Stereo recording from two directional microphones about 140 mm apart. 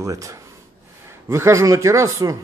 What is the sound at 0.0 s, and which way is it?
Speech, 25° right (ahead or behind).